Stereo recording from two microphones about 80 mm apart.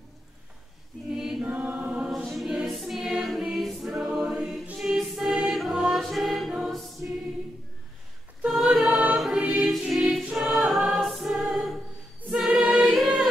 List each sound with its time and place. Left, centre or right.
1.1 s choir: centre
1.4 s choir: right
2.0 s choir: centre
4.8 s music: centre
7.0 s choir: right
8.5 s a capella: centre
9.8 s choir: centre
10.2 s music: centre
12.3 s choir: centre